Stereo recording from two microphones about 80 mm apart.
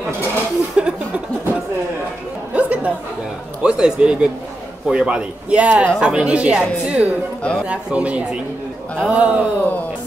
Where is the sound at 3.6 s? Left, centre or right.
Centre.